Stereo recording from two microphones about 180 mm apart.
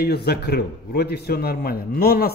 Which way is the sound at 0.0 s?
65° left (ahead or behind).